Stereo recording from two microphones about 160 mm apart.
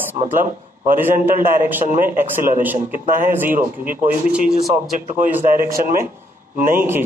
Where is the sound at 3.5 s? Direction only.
60° right (ahead or behind).